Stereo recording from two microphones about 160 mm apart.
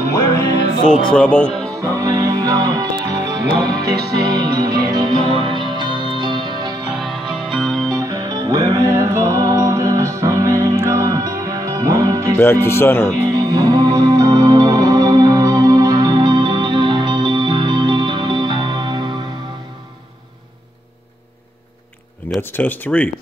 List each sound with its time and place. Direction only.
1.0 s speech: 10° left (ahead or behind)
1.8 s music: 20° right (ahead or behind)
6.9 s music: centre (ahead or behind)
7.9 s music: 20° right (ahead or behind)
12.4 s speech: 15° left (ahead or behind)
13.3 s music: 25° right (ahead or behind)
22.4 s speech: 10° left (ahead or behind)